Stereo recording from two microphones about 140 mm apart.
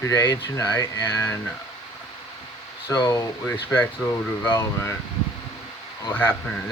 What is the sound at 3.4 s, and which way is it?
Speech, 15° left (ahead or behind).